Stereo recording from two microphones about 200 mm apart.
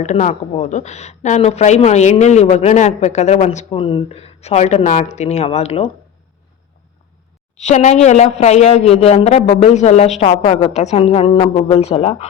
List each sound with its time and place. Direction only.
0.0 s a woman's voice: 35° left (ahead or behind)
7.6 s a woman's voice: 35° left (ahead or behind)